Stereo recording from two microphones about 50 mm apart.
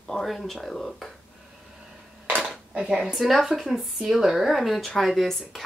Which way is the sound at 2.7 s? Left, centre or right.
Centre.